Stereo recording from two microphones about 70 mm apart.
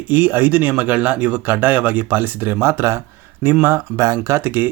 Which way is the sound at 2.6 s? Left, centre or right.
Right.